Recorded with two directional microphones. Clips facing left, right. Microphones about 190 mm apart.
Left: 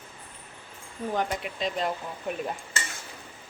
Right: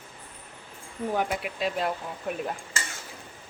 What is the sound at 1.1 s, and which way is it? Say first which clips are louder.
Speech: right 1 dB; 10° right (ahead or behind).